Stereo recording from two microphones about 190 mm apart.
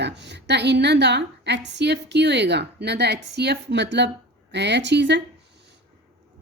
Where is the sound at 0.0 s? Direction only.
65° right (ahead or behind).